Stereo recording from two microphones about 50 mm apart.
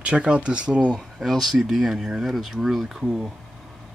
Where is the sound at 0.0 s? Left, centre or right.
Right.